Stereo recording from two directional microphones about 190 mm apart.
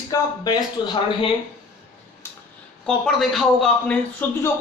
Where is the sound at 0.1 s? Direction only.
20° left (ahead or behind).